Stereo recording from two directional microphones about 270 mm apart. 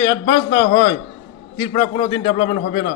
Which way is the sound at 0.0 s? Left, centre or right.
Centre.